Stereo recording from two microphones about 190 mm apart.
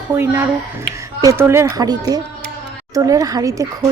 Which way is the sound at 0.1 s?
15° right (ahead or behind).